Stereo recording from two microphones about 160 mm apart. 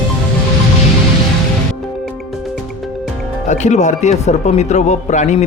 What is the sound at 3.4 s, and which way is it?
Speech, 50° left (ahead or behind).